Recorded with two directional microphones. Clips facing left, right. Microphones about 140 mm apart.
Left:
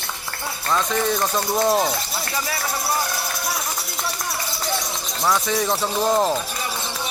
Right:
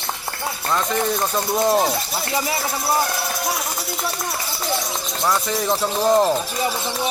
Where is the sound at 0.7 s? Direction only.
5° right (ahead or behind).